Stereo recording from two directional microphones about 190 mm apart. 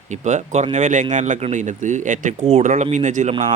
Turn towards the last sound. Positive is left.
turn(degrees=-40)  # may be behind; listen again after turning